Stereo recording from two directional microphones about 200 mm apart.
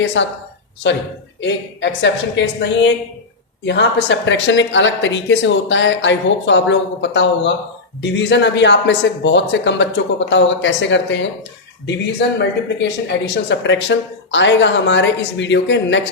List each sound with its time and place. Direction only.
0.0 s speech: 65° left (ahead or behind)
12.4 s speech: 60° left (ahead or behind)